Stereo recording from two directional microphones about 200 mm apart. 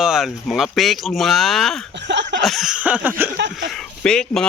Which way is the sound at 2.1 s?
60° right (ahead or behind).